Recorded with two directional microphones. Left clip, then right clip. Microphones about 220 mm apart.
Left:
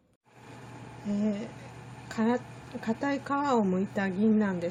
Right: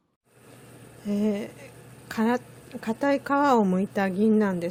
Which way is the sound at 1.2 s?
35° right (ahead or behind).